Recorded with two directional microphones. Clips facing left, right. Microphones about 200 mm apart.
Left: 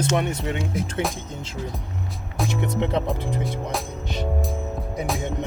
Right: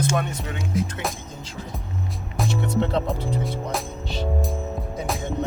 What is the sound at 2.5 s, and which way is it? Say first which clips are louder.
Speech: right 1 dB; 15° left (ahead or behind).